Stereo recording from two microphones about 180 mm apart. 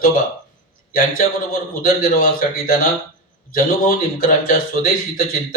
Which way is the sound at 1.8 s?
50° left (ahead or behind).